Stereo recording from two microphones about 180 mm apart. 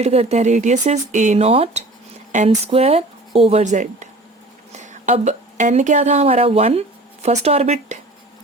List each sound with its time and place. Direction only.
0.0 s speech: 35° right (ahead or behind)